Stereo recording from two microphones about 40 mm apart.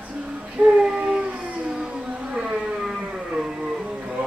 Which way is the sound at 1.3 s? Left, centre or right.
Right.